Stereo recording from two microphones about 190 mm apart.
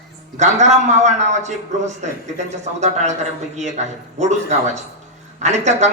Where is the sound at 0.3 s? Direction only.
40° right (ahead or behind).